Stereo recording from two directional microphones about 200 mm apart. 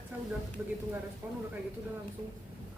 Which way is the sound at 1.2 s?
10° right (ahead or behind).